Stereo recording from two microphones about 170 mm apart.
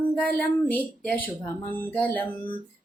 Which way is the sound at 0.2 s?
5° left (ahead or behind).